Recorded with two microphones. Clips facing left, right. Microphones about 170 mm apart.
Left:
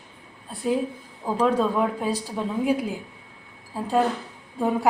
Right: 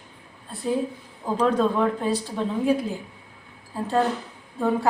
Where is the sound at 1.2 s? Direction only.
5° left (ahead or behind).